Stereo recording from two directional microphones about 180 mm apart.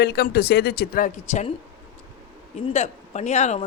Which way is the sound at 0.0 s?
60° left (ahead or behind).